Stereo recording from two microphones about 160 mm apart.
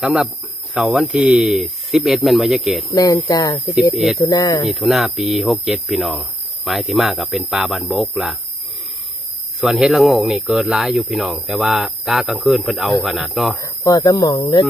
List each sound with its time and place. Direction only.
0.0 s speech: 5° right (ahead or behind)
2.9 s speech: 25° left (ahead or behind)
3.9 s speech: centre (ahead or behind)
4.2 s speech: 25° left (ahead or behind)
4.6 s speech: centre (ahead or behind)
9.6 s speech: 5° right (ahead or behind)
13.6 s speech: 20° left (ahead or behind)